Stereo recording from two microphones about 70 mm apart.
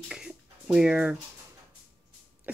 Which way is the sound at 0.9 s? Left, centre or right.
Centre.